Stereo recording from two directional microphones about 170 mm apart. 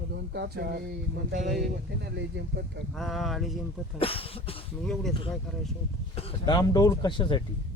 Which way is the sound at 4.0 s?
35° left (ahead or behind).